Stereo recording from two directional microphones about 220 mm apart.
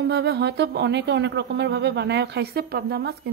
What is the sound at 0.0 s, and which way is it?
A woman's voice, 50° right (ahead or behind).